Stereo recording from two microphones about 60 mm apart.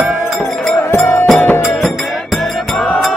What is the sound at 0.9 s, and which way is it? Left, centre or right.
Music, left.